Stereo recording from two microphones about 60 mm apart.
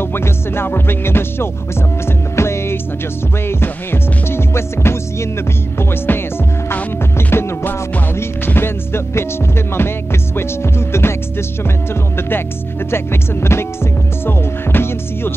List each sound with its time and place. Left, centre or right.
0.0 s music: left
12.2 s music: left